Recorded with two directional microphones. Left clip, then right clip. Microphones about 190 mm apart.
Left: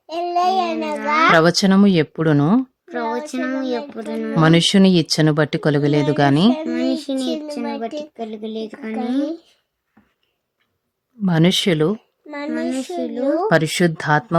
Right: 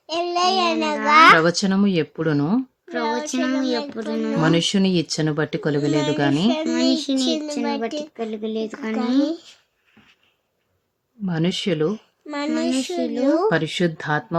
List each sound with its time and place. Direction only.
0.1 s a child's voice: centre (ahead or behind)
1.3 s speech: 40° left (ahead or behind)
2.8 s a child's voice: centre (ahead or behind)
4.4 s speech: 40° left (ahead or behind)
6.5 s a child's voice: centre (ahead or behind)
11.3 s speech: 40° left (ahead or behind)
12.3 s a child's voice: centre (ahead or behind)
13.7 s speech: 40° left (ahead or behind)